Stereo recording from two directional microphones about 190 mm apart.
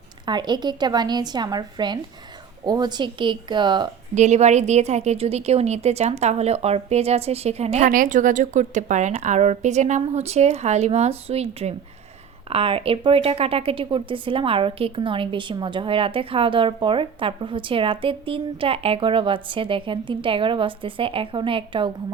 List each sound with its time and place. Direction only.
0.3 s speech: 25° right (ahead or behind)
4.1 s a woman's voice: 35° right (ahead or behind)